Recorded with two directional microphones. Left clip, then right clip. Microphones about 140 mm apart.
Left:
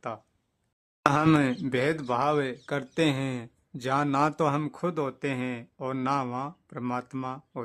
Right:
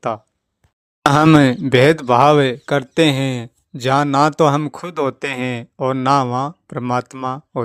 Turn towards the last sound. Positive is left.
turn(degrees=-50)  # may be behind; listen again after turning